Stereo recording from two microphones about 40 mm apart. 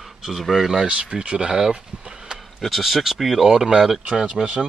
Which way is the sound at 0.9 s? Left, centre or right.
Right.